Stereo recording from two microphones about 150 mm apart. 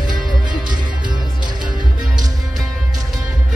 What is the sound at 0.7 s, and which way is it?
Music, 30° right (ahead or behind).